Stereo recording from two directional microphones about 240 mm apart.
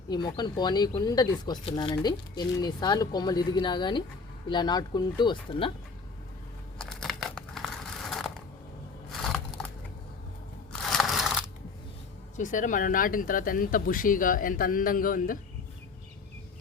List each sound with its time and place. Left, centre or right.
0.1 s speech: centre
6.7 s crumpling: centre
9.2 s a sound: centre
10.7 s crunch: centre
12.4 s speech: left